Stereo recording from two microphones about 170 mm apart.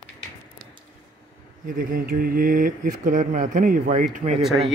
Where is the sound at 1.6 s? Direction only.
55° right (ahead or behind).